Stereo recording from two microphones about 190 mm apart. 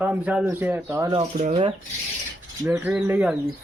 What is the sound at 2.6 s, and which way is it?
Speech, 15° right (ahead or behind).